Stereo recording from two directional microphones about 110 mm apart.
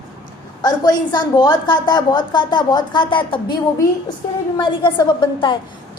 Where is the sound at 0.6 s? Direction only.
40° left (ahead or behind).